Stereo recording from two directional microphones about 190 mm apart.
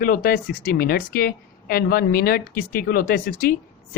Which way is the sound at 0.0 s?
50° left (ahead or behind).